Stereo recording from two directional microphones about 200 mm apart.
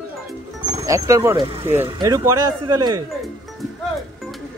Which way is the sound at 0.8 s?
15° right (ahead or behind).